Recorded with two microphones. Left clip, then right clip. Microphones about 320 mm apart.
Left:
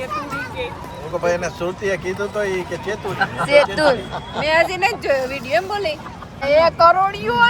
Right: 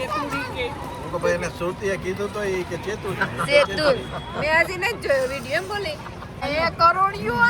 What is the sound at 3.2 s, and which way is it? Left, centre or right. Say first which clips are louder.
Speech: left 4 dB; left.